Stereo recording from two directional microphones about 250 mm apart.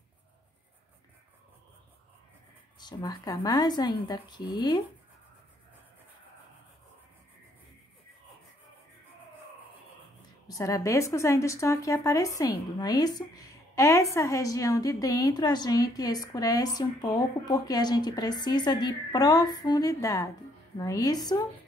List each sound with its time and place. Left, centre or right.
2.8 s speech: centre
10.5 s speech: centre